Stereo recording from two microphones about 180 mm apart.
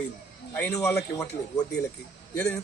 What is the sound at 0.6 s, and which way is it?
Speech, 10° left (ahead or behind).